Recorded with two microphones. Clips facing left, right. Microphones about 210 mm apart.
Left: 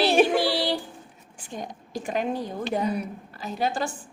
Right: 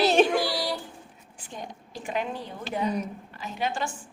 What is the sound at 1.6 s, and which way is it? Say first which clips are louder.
Speech: left 5 dB; 45° left (ahead or behind).